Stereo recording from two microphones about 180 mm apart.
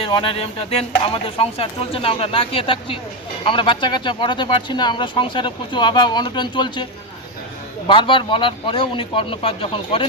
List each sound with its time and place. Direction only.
0.0 s speech: 30° left (ahead or behind)
7.9 s speech: 30° left (ahead or behind)